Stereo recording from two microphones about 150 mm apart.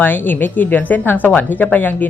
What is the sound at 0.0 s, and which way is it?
Speech, 15° left (ahead or behind).